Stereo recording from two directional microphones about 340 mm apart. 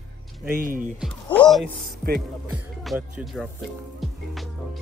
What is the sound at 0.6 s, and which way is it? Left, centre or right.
Speech, right.